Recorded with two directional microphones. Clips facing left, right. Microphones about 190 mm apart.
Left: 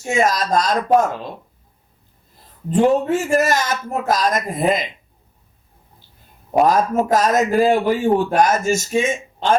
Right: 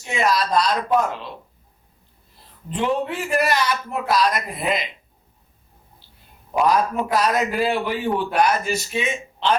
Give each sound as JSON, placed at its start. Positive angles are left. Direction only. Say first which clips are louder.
{"t": 0.0, "sound": "a man's voice", "louder": "left 3 dB", "side_deg": 45}
{"t": 2.6, "sound": "a man's voice", "louder": "left 7 dB", "side_deg": 45}
{"t": 6.5, "sound": "a man's voice", "louder": "left 4 dB", "side_deg": 45}